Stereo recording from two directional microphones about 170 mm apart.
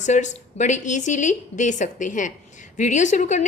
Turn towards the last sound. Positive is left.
turn(degrees=45)  # may be behind; listen again after turning